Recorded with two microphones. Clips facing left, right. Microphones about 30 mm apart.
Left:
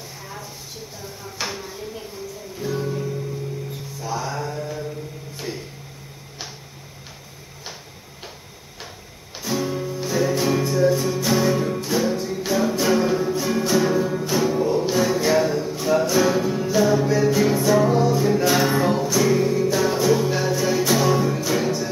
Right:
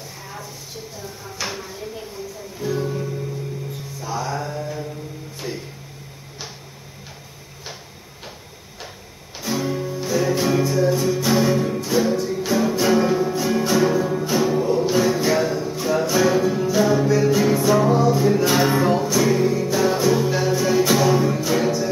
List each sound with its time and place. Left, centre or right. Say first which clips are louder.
1.4 s a sound: even; centre
2.6 s music: right 2 dB; centre
4.0 s mantra: right 1 dB; centre
9.4 s music: right 1 dB; centre